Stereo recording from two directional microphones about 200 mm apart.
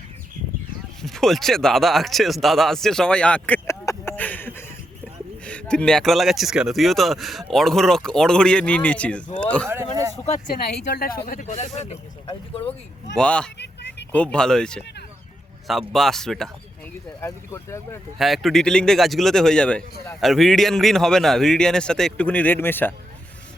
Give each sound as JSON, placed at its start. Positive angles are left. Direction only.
{"t": 1.0, "sound": "speech", "side_deg": 0}
{"t": 9.6, "sound": "a sound", "side_deg": -15}
{"t": 10.5, "sound": "speech", "side_deg": 55}
{"t": 11.3, "sound": "speech", "side_deg": 40}
{"t": 13.1, "sound": "speech", "side_deg": 5}
{"t": 15.9, "sound": "speech", "side_deg": 0}
{"t": 17.2, "sound": "speech", "side_deg": 15}
{"t": 18.2, "sound": "speech", "side_deg": 0}